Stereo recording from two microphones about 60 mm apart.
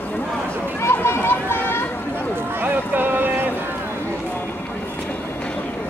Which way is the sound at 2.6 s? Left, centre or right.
Right.